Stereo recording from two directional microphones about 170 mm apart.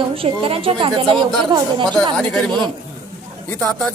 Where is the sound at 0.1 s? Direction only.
35° right (ahead or behind).